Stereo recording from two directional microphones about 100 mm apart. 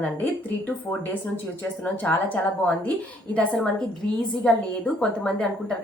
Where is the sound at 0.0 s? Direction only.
15° left (ahead or behind).